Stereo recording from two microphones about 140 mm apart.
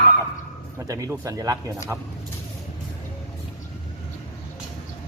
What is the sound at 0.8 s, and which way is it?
Speech, 25° right (ahead or behind).